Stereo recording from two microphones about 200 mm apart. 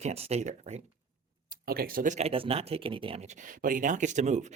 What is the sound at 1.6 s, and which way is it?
Speech, 50° right (ahead or behind).